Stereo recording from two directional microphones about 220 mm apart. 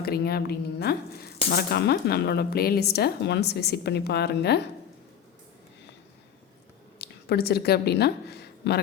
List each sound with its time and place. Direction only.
0.0 s speech: 45° left (ahead or behind)
7.0 s a woman's voice: 45° left (ahead or behind)